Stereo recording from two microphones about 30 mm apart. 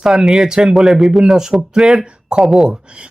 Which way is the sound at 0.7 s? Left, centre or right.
Centre.